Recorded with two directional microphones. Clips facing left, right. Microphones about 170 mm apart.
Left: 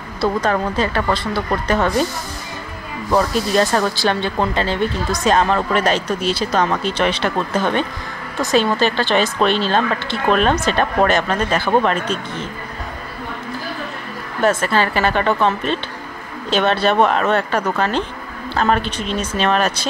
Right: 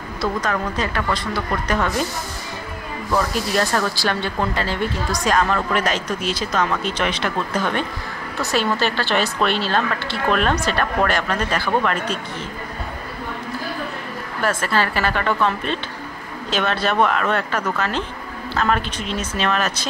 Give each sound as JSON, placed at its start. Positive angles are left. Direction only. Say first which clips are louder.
{"t": 0.2, "sound": "speech", "louder": "left 5 dB", "side_deg": 30}
{"t": 3.1, "sound": "speech", "louder": "left 4 dB", "side_deg": 25}
{"t": 14.4, "sound": "speech", "louder": "left 4 dB", "side_deg": 25}